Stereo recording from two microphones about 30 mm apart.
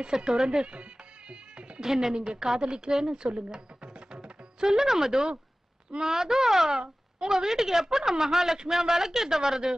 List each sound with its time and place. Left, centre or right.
0.0 s speech: right
1.8 s speech: centre
2.1 s a woman's voice: right
2.6 s music: right
4.7 s a woman's voice: centre